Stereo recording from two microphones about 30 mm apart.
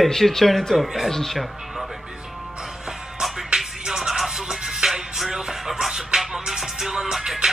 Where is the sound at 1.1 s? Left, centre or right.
Centre.